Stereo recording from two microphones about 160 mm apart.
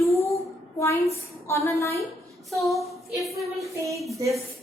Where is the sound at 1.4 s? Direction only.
20° left (ahead or behind).